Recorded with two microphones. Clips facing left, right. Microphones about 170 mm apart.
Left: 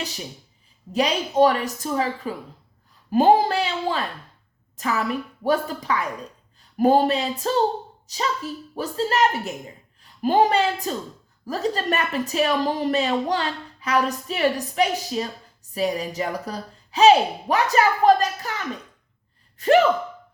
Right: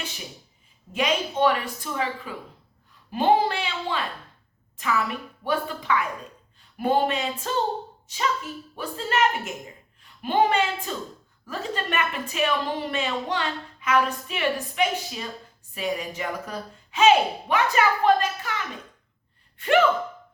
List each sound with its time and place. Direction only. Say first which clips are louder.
0.9 s a woman's voice: left 5 dB; 35° left (ahead or behind)
19.5 s gasp: left 3 dB; 40° left (ahead or behind)